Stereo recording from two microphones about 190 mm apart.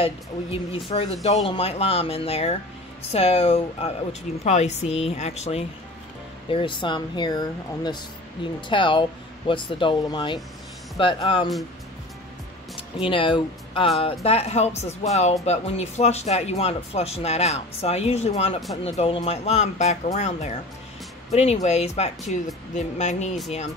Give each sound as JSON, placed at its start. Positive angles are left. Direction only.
{"t": 0.0, "sound": "speech", "side_deg": 30}
{"t": 13.0, "sound": "speech", "side_deg": 25}